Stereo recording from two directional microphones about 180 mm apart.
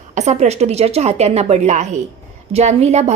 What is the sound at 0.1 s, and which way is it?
A woman's voice, 40° right (ahead or behind).